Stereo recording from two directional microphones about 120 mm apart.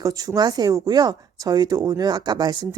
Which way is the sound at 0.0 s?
30° right (ahead or behind).